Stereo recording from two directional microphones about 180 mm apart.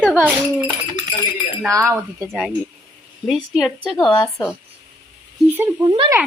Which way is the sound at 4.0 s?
25° left (ahead or behind).